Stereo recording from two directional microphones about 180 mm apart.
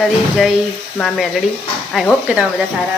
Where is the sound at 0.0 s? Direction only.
Centre (ahead or behind).